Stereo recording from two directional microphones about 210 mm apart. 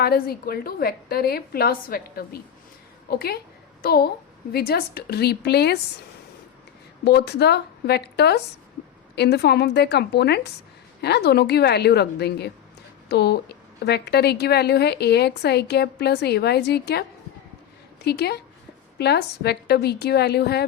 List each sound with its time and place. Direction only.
0.0 s a woman's voice: 45° left (ahead or behind)
7.0 s a woman's voice: 50° left (ahead or behind)